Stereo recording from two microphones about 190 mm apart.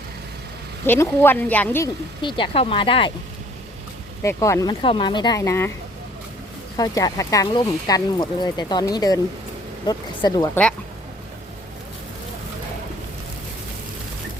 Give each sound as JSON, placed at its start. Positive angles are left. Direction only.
{"t": 0.9, "sound": "speech", "side_deg": 10}
{"t": 2.2, "sound": "speech", "side_deg": 25}
{"t": 4.2, "sound": "speech", "side_deg": 15}
{"t": 6.7, "sound": "speech", "side_deg": 20}